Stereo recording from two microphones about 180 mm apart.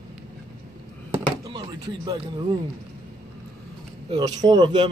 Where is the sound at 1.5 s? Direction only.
25° right (ahead or behind).